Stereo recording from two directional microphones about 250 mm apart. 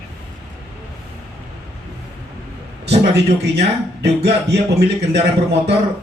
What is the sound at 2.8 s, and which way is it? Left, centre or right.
Speech, right.